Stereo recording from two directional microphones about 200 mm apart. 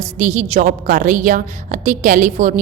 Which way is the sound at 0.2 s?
35° right (ahead or behind).